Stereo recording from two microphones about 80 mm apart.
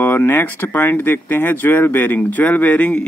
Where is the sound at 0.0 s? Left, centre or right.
Left.